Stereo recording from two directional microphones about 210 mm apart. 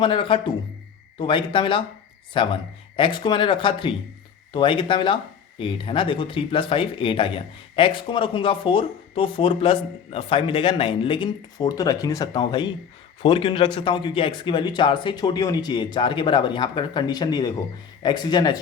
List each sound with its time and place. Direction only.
0.0 s speech: 25° left (ahead or behind)